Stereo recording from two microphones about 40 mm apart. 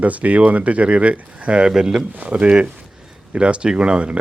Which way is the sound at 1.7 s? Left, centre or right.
Centre.